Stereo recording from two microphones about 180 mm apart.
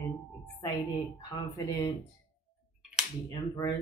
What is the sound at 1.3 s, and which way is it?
Speech, 20° left (ahead or behind).